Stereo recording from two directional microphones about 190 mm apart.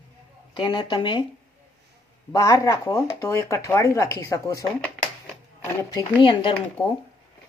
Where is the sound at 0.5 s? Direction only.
20° left (ahead or behind).